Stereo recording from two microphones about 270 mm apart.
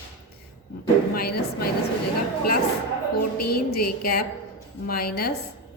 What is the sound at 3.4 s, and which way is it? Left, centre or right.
A woman's voice, left.